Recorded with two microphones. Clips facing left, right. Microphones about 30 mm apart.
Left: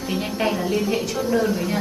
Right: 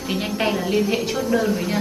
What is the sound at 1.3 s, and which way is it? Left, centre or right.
Speech, centre.